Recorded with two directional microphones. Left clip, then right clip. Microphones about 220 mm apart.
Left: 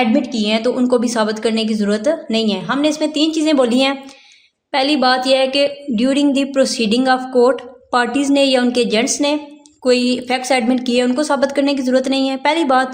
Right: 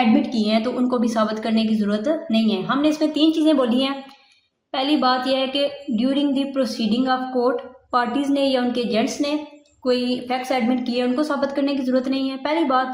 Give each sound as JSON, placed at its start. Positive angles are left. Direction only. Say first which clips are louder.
{"t": 0.4, "sound": "a woman's voice", "louder": "left 5 dB", "side_deg": 55}